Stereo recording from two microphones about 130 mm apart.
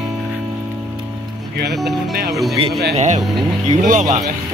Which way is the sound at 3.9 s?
70° right (ahead or behind).